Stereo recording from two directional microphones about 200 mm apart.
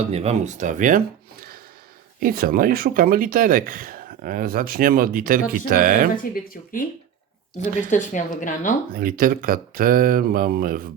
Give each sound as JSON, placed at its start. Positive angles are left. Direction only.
{"t": 0.1, "sound": "speech", "side_deg": -30}
{"t": 6.3, "sound": "speech", "side_deg": 45}
{"t": 7.9, "sound": "a woman's voice", "side_deg": 40}
{"t": 8.9, "sound": "speech", "side_deg": -45}